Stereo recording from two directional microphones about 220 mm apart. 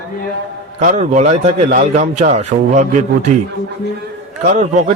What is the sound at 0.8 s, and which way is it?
A man's voice, 35° right (ahead or behind).